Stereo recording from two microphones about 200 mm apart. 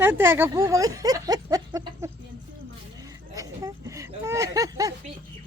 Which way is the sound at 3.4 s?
15° right (ahead or behind).